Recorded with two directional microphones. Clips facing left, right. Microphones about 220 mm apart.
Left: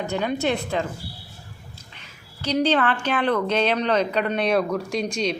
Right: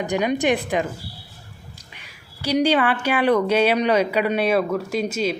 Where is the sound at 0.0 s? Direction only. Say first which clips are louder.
Right 3 dB; 15° right (ahead or behind).